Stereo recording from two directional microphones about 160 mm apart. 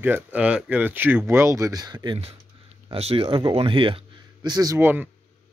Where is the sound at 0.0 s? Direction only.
10° right (ahead or behind).